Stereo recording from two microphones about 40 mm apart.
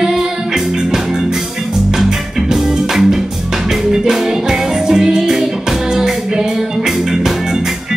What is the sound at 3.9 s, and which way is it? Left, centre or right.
Music, centre.